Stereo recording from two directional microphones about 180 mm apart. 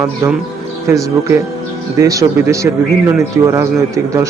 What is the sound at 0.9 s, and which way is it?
A man's voice, 15° right (ahead or behind).